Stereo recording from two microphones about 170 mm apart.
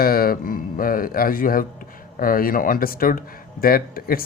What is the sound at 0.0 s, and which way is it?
Speech, 60° left (ahead or behind).